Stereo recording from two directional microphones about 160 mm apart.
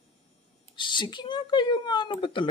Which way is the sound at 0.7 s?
30° left (ahead or behind).